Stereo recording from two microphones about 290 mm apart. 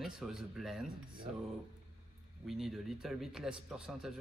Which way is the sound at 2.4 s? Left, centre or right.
Centre.